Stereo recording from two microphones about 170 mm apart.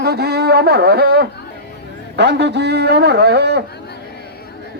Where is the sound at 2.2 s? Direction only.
90° right.